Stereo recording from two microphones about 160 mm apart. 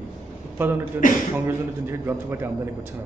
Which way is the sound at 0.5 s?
15° right (ahead or behind).